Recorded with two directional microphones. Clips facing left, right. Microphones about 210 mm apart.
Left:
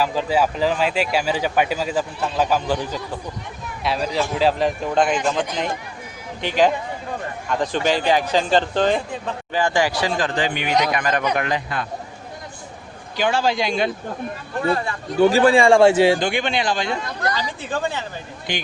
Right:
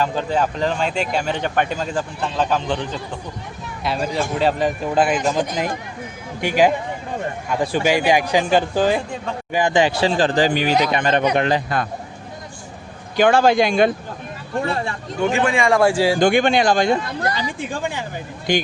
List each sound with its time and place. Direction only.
0.0 s a man's voice: 5° left (ahead or behind); by 11.9 s 40° right (ahead or behind)
13.1 s speech: 55° right (ahead or behind)
14.6 s speech: 25° right (ahead or behind)
15.2 s a man's voice: 35° left (ahead or behind)
16.2 s speech: 45° right (ahead or behind)
17.6 s a man's voice: 15° right (ahead or behind)
18.5 s speech: 45° right (ahead or behind)